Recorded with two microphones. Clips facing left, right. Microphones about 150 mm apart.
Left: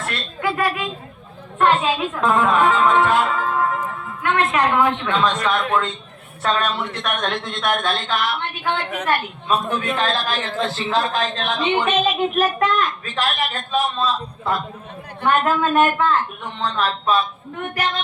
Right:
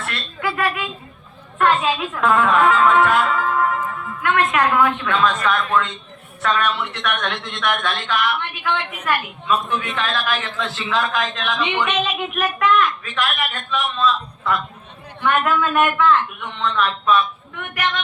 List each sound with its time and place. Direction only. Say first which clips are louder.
1.5 s a man's voice: left 1 dB; 25° left (ahead or behind)